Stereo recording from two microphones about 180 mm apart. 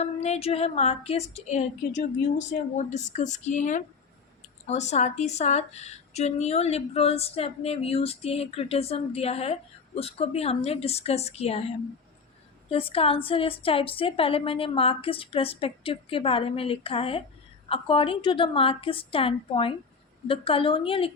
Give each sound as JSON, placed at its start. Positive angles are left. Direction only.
{"t": 0.0, "sound": "speech", "side_deg": 35}
{"t": 12.6, "sound": "a woman's voice", "side_deg": 30}